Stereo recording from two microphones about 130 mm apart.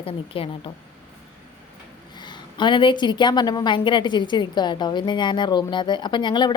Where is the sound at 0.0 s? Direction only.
45° left (ahead or behind).